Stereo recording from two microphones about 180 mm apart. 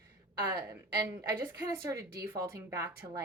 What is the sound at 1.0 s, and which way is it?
Speech, 15° right (ahead or behind).